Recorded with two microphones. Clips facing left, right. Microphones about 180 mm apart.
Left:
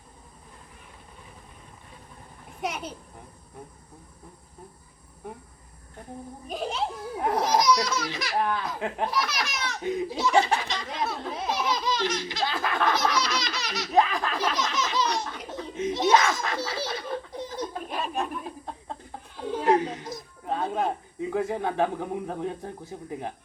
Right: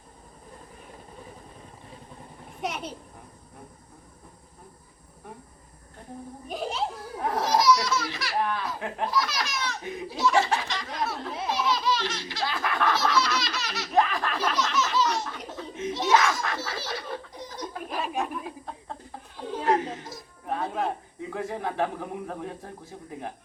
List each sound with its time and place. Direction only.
2.6 s a child's voice: centre (ahead or behind)
6.5 s a child's voice: centre (ahead or behind)
7.2 s speech: 20° left (ahead or behind)
11.4 s baby laughter: 15° left (ahead or behind)
15.5 s belly laugh: 20° left (ahead or behind)
17.8 s a sound: 5° right (ahead or behind)
19.6 s a sound: 20° left (ahead or behind)